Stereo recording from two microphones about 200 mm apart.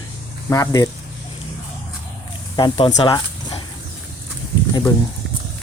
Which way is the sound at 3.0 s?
20° left (ahead or behind).